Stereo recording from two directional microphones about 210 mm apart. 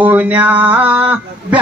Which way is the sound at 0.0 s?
5° right (ahead or behind).